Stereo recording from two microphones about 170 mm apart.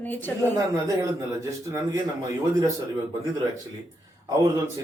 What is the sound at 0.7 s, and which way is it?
A man's voice, 20° right (ahead or behind).